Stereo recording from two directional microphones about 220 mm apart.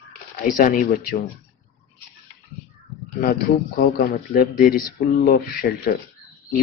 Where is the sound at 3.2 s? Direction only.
45° left (ahead or behind).